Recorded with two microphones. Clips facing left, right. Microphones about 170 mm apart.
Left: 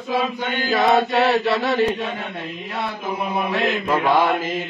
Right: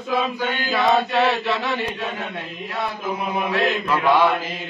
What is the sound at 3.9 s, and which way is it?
Mantra, 45° left (ahead or behind).